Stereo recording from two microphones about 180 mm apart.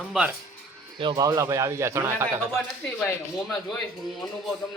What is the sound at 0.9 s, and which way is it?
Speech, 25° right (ahead or behind).